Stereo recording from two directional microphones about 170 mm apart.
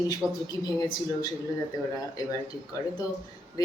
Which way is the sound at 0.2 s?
Centre (ahead or behind).